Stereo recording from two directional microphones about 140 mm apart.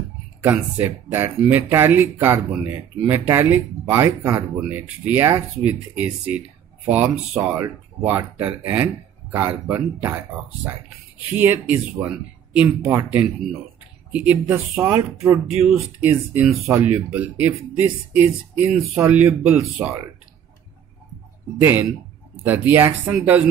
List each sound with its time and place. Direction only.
0.4 s speech: 20° right (ahead or behind)
8.0 s speech: 10° right (ahead or behind)
14.1 s speech: 10° right (ahead or behind)
21.5 s speech: 15° right (ahead or behind)